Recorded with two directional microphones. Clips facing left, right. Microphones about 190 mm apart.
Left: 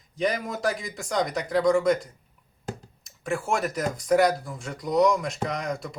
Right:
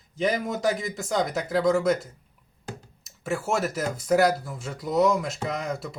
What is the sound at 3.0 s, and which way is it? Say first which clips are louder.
Speech: even; 5° right (ahead or behind).